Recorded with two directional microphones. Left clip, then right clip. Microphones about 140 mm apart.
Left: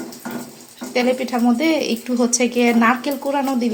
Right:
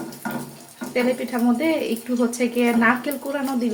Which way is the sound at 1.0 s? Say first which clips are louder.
Left 3 dB; 40° left (ahead or behind).